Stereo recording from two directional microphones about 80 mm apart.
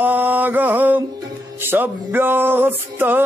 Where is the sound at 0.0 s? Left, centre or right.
Right.